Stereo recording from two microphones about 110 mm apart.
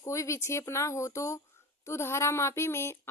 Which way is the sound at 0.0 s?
25° left (ahead or behind).